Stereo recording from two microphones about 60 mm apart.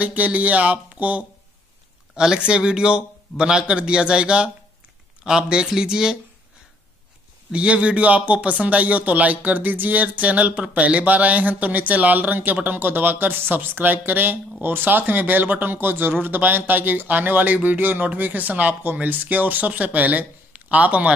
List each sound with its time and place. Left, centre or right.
0.0 s speech: right
7.5 s speech: centre